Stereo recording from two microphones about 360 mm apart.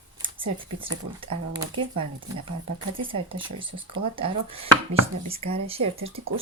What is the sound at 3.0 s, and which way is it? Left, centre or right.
Speech, centre.